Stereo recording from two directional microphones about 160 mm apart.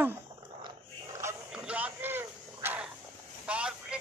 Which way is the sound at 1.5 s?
5° right (ahead or behind).